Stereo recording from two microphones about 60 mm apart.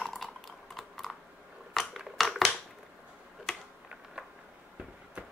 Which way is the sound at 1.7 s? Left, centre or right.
Centre.